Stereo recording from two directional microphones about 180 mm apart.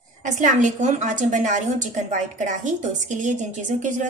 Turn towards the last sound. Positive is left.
turn(degrees=-45)  # may be behind; listen again after turning